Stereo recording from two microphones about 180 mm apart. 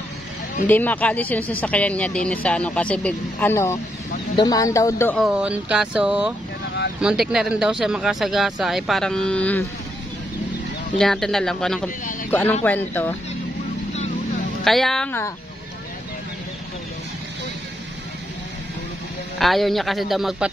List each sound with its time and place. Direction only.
0.7 s speech: 10° left (ahead or behind)
5.1 s speech: 5° right (ahead or behind)
11.0 s speech: centre (ahead or behind)
14.6 s speech: centre (ahead or behind)
19.3 s speech: centre (ahead or behind)